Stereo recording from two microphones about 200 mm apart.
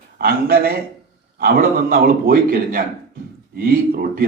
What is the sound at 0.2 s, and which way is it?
A man's voice, 50° right (ahead or behind).